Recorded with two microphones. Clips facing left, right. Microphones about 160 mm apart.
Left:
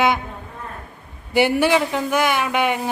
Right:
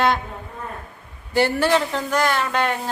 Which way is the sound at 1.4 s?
10° left (ahead or behind).